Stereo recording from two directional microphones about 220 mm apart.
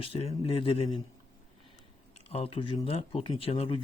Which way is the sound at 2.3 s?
25° left (ahead or behind).